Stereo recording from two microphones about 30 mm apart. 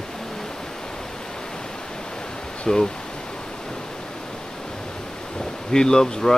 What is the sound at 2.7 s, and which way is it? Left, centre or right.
Speech, centre.